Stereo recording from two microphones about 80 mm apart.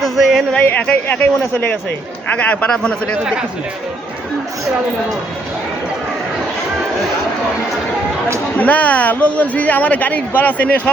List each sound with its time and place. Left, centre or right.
0.0 s a sound: centre
0.6 s speech: left
2.3 s a man's voice: centre
8.5 s speech: centre